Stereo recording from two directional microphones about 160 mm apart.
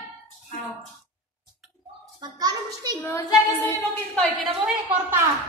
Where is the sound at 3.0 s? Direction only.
15° left (ahead or behind).